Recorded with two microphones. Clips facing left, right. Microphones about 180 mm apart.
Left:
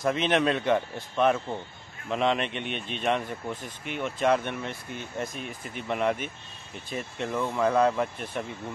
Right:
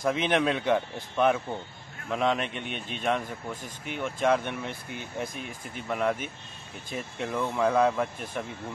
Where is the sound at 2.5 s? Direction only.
60° left (ahead or behind).